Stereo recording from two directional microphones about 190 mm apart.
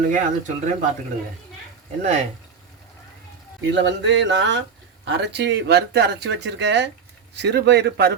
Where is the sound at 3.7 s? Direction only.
70° right (ahead or behind).